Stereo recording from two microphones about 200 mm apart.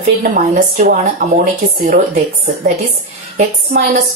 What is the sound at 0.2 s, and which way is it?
A woman's voice, 40° right (ahead or behind).